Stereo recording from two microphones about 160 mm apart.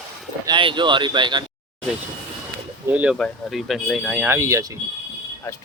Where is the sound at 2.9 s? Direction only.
10° right (ahead or behind).